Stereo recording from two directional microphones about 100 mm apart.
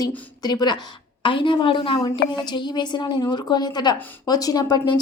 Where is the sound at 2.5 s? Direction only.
50° left (ahead or behind).